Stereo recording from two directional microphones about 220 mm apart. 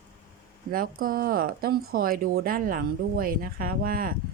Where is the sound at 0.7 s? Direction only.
40° right (ahead or behind).